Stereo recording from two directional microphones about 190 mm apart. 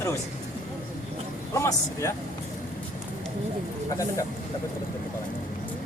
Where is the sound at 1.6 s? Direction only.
15° left (ahead or behind).